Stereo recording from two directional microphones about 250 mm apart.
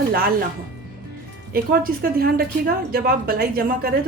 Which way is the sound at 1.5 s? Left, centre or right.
Right.